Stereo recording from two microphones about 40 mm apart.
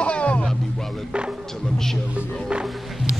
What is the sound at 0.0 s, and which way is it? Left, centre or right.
Music, left.